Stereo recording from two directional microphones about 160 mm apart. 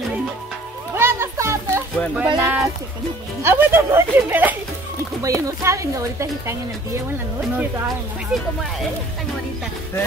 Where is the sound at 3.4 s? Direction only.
15° right (ahead or behind).